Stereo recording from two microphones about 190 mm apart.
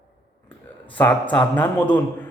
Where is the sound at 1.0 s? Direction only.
10° left (ahead or behind).